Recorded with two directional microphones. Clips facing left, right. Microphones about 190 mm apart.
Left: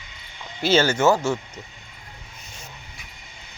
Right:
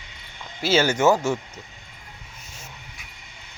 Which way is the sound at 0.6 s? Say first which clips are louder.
Left 1 dB; 5° right (ahead or behind).